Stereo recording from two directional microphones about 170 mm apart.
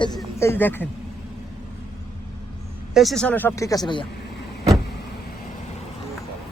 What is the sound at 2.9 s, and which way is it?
Speech, centre (ahead or behind).